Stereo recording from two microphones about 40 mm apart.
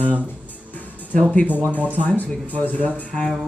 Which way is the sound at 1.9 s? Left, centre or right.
Left.